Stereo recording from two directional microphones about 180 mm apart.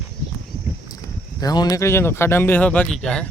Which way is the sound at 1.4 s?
20° left (ahead or behind).